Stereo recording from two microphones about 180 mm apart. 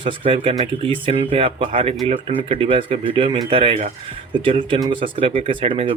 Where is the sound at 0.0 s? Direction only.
30° right (ahead or behind).